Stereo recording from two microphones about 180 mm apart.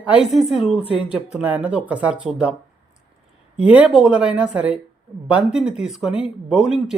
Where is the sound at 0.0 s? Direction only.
5° right (ahead or behind).